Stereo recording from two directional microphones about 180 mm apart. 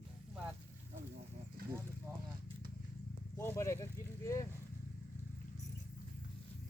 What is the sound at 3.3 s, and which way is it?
Speech, 15° left (ahead or behind).